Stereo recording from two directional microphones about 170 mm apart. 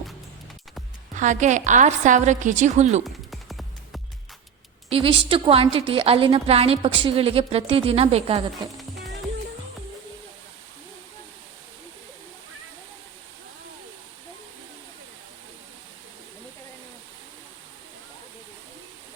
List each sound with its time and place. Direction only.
1.1 s a woman's voice: 45° right (ahead or behind)
3.3 s music: centre (ahead or behind)
4.9 s a woman's voice: 30° right (ahead or behind)